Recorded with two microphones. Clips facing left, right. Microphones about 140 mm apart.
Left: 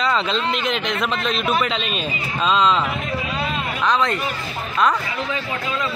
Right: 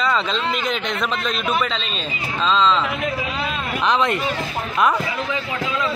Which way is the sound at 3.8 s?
20° right (ahead or behind).